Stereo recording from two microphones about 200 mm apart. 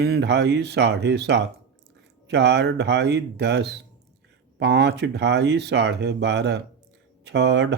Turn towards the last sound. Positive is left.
turn(degrees=-60)  # may be behind; listen again after turning